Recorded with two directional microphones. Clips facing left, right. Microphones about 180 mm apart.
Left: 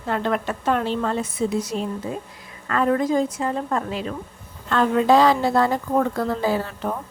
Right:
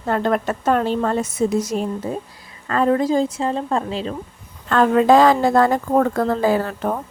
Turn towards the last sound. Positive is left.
turn(degrees=-50)  # may be behind; listen again after turning